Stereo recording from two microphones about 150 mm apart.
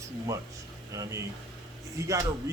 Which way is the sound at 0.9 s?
20° right (ahead or behind).